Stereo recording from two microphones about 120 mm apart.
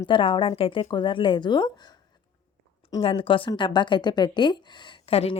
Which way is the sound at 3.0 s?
50° left (ahead or behind).